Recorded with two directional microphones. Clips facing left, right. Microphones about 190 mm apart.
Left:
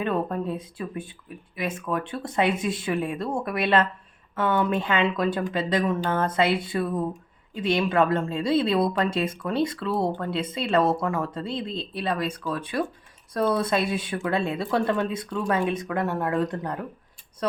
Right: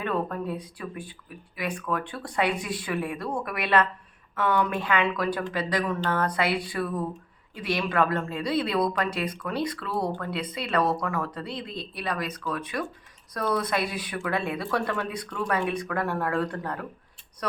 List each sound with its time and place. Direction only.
0.0 s speech: 25° left (ahead or behind)